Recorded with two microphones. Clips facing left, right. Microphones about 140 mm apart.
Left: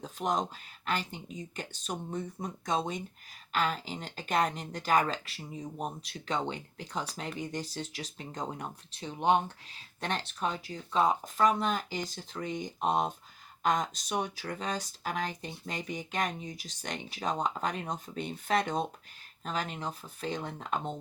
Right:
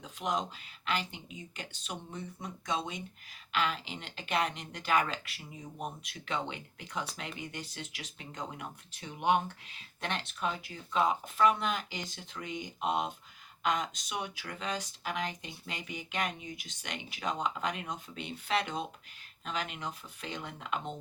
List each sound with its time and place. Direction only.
0.0 s speech: 40° left (ahead or behind)